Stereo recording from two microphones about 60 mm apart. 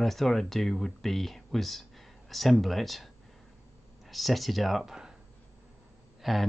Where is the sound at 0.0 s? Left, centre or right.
Centre.